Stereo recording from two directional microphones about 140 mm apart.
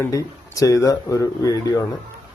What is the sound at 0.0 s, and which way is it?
Speech, 25° left (ahead or behind).